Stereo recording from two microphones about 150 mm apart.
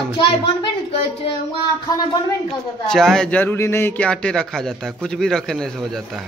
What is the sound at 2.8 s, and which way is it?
Speech, 5° left (ahead or behind).